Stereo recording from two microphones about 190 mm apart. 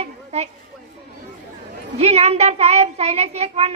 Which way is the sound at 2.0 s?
35° right (ahead or behind).